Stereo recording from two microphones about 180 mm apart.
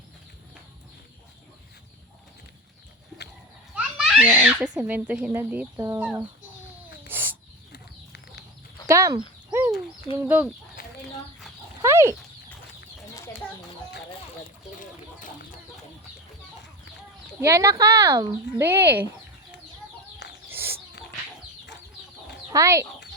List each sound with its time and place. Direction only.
3.8 s children playing: 5° right (ahead or behind)
4.8 s speech: 10° right (ahead or behind)
7.1 s a sound: 10° right (ahead or behind)
7.7 s a sound: 70° left (ahead or behind)
8.9 s speech: 20° right (ahead or behind)
9.5 s a sound: 10° right (ahead or behind)
10.2 s speech: 10° right (ahead or behind)
11.8 s dog: 15° right (ahead or behind)
17.4 s speech: 15° right (ahead or behind)
20.5 s bird: 10° right (ahead or behind)
22.4 s speech: 15° right (ahead or behind)